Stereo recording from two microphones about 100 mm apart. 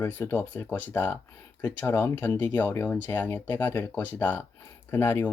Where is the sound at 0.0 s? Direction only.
20° left (ahead or behind).